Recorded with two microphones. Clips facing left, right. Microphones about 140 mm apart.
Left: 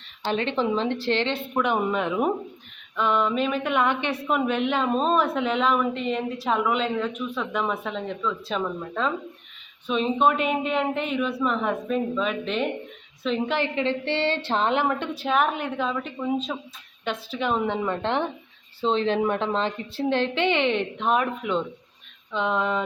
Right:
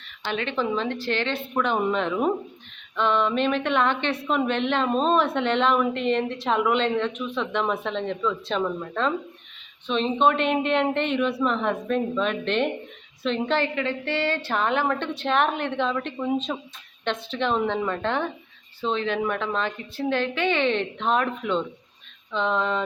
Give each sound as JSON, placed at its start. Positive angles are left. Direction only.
{"t": 0.3, "sound": "a woman's voice", "side_deg": 30}
{"t": 1.5, "sound": "a woman's voice", "side_deg": 10}
{"t": 13.6, "sound": "a woman's voice", "side_deg": 25}
{"t": 17.8, "sound": "a woman's voice", "side_deg": 20}